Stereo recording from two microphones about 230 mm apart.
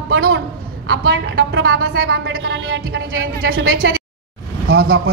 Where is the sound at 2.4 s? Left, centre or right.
Right.